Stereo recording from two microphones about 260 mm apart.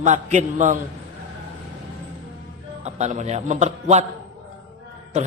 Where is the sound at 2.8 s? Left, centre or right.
Right.